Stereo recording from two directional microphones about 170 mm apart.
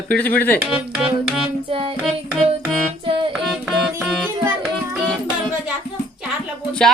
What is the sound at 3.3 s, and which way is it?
Music, centre (ahead or behind).